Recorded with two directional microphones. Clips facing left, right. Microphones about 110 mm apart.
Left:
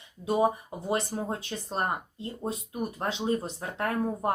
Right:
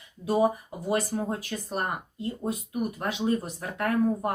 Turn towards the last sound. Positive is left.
turn(degrees=25)  # may be behind; listen again after turning